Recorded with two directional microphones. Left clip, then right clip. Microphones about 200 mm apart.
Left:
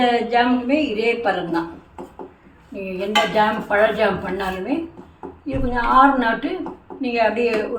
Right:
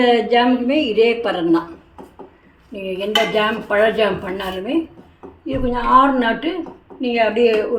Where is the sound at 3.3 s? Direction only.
35° right (ahead or behind).